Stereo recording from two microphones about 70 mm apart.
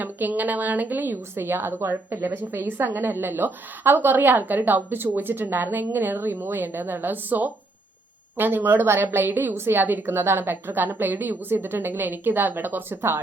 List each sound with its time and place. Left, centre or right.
0.0 s a woman's voice: right